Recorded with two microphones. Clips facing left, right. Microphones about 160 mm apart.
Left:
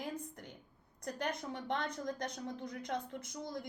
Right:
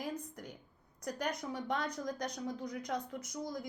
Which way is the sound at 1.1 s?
25° left (ahead or behind).